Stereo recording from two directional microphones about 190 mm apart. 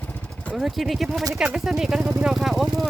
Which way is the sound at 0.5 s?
Centre (ahead or behind).